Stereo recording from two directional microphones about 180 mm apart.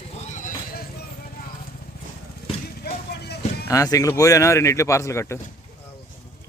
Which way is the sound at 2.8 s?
65° left (ahead or behind).